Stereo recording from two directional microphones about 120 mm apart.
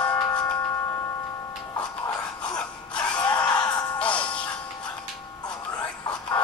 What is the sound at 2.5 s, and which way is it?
Music, 10° left (ahead or behind).